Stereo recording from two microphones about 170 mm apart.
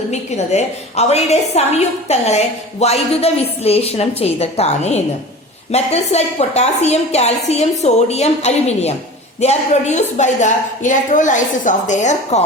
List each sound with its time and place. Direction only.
0.1 s a woman's voice: 40° left (ahead or behind)